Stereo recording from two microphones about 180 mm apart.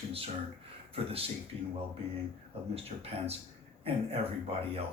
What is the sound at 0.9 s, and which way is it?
Speech, 30° right (ahead or behind).